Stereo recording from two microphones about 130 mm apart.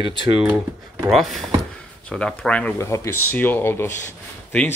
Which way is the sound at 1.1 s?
Centre (ahead or behind).